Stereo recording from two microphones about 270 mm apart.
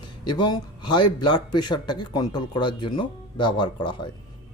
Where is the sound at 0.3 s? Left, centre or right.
Centre.